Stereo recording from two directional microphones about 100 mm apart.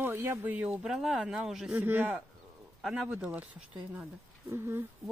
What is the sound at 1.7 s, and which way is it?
Speech, 20° right (ahead or behind).